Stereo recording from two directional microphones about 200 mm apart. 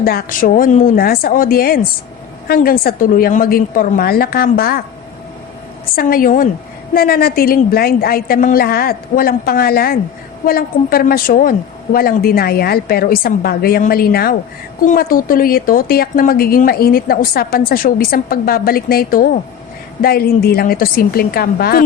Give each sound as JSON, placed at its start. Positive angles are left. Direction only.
{"t": 0.0, "sound": "a woman's voice", "side_deg": 45}
{"t": 6.0, "sound": "a woman's voice", "side_deg": 45}